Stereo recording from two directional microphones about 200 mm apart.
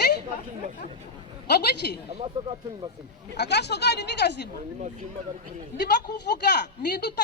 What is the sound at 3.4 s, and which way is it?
Speech, 55° left (ahead or behind).